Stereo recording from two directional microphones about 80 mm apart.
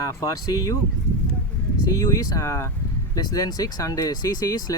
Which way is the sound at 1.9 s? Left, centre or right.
Left.